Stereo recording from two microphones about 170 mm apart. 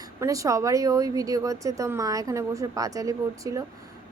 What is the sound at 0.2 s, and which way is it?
A woman's voice, 20° right (ahead or behind).